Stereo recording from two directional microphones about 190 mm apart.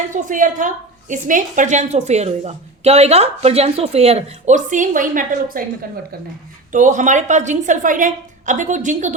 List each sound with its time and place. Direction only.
0.1 s a woman's voice: 45° right (ahead or behind)
6.7 s a woman's voice: 40° right (ahead or behind)